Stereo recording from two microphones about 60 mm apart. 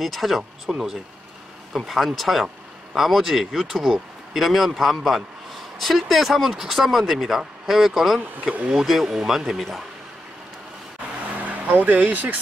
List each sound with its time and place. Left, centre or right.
0.0 s speech: centre
0.4 s speech: centre
1.7 s speech: centre
11.4 s speech: right